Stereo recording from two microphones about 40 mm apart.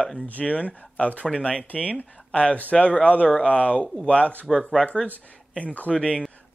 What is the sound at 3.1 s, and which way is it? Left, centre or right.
Speech, left.